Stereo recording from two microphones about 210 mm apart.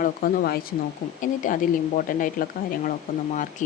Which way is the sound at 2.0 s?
40° left (ahead or behind).